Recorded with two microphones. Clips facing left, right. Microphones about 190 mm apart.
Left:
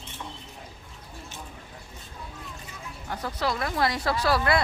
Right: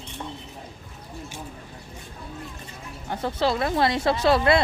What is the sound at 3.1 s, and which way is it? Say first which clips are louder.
Speech: right 5 dB; 25° right (ahead or behind).